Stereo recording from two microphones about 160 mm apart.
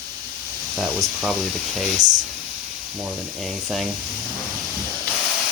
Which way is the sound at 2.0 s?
50° right (ahead or behind).